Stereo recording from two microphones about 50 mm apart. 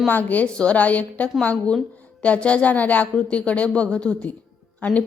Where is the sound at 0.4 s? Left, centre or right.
Left.